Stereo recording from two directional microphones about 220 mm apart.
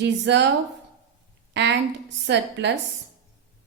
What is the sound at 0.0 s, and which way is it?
Speech, 50° right (ahead or behind).